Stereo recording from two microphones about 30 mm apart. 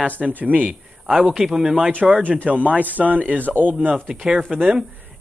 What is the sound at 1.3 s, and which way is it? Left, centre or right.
Speech, centre.